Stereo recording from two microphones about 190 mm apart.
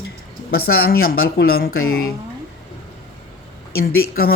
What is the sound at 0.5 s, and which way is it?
Speech, 55° left (ahead or behind).